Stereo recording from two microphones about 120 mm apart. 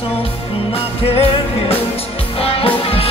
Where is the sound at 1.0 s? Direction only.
55° left (ahead or behind).